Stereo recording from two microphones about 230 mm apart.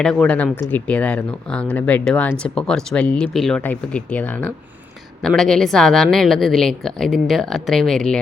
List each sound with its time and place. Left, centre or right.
0.0 s a woman's voice: centre